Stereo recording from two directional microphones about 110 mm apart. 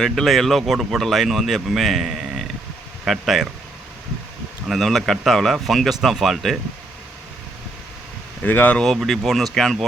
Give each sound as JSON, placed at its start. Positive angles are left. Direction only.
{"t": 0.0, "sound": "speech", "side_deg": 5}
{"t": 4.7, "sound": "speech", "side_deg": 0}
{"t": 8.4, "sound": "speech", "side_deg": 15}
{"t": 8.8, "sound": "speech", "side_deg": 0}